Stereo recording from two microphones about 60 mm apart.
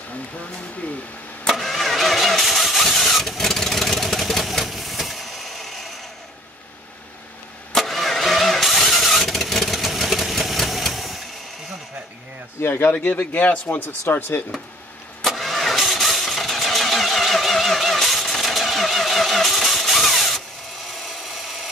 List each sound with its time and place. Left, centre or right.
1.5 s engine starting: centre
7.7 s vehicle: centre
12.5 s a man's voice: left
12.9 s speech: left
15.2 s vehicle: centre
20.9 s wood: centre